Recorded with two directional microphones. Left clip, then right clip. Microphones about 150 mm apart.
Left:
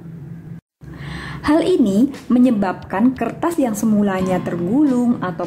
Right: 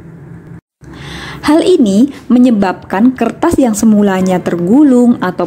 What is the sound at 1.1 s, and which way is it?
A woman's voice, 25° right (ahead or behind).